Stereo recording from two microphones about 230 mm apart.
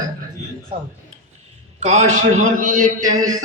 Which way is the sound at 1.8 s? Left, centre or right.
Right.